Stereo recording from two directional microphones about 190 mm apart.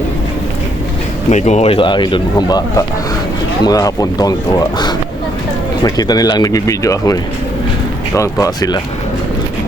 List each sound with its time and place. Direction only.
1.3 s speech: 40° left (ahead or behind); by 8.8 s 20° left (ahead or behind)